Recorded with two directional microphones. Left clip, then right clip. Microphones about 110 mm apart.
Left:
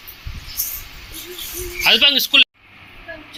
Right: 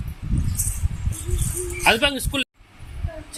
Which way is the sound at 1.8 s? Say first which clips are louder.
Left 6 dB; 25° right (ahead or behind).